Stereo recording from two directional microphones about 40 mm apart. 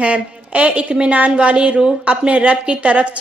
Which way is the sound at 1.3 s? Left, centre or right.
Right.